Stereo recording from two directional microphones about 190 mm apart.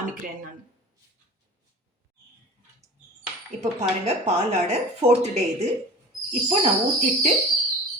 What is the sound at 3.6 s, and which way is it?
Speech, 35° right (ahead or behind).